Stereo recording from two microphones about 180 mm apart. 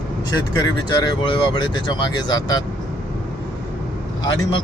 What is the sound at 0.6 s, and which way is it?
Speech, 25° left (ahead or behind).